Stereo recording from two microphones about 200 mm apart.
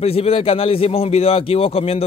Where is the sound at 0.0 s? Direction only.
30° left (ahead or behind).